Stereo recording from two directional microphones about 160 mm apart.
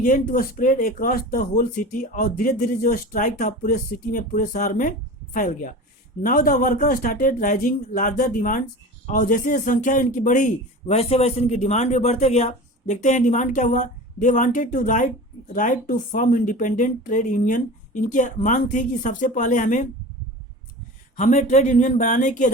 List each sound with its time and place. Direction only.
0.0 s a man's voice: 55° left (ahead or behind)
21.2 s a man's voice: 50° left (ahead or behind)